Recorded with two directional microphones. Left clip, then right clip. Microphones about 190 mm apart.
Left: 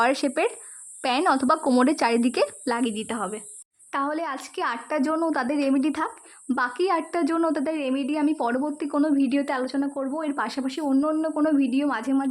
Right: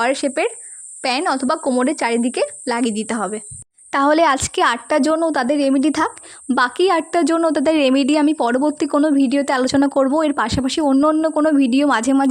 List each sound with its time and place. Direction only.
0.0 s a woman's voice: 10° right (ahead or behind)
2.7 s a woman's voice: 20° right (ahead or behind)
3.9 s a woman's voice: 40° right (ahead or behind)
9.7 s speech: 40° right (ahead or behind)